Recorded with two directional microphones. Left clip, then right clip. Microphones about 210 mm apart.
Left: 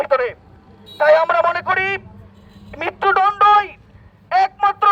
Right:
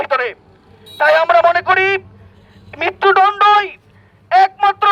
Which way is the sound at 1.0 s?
20° right (ahead or behind).